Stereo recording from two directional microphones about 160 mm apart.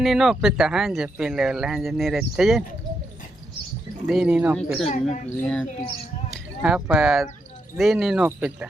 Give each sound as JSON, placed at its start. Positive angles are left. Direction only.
{"t": 0.0, "sound": "speech", "side_deg": 0}
{"t": 4.0, "sound": "speech", "side_deg": -5}
{"t": 4.9, "sound": "speech", "side_deg": 45}
{"t": 6.3, "sound": "speech", "side_deg": -5}